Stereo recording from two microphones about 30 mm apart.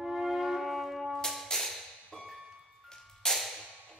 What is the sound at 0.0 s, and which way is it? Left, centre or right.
Music, centre.